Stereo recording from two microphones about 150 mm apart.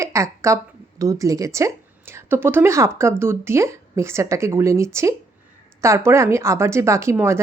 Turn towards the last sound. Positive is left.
turn(degrees=-15)  # may be behind; listen again after turning